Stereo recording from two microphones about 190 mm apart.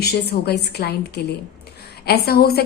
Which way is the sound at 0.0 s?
55° left (ahead or behind).